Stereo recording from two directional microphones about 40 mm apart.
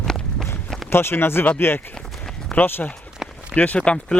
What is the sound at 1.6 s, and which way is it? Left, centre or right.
Speech, left.